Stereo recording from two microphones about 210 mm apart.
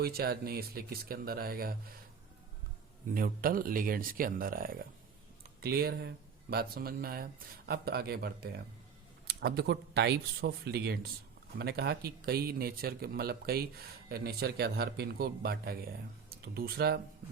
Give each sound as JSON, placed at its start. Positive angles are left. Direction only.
{"t": 0.0, "sound": "speech", "side_deg": -45}
{"t": 3.2, "sound": "speech", "side_deg": -45}